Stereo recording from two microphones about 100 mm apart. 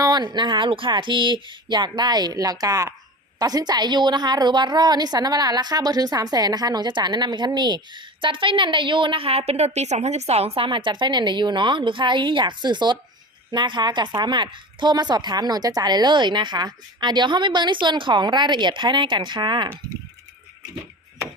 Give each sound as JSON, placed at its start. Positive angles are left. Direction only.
{"t": 0.0, "sound": "a woman's voice", "side_deg": -45}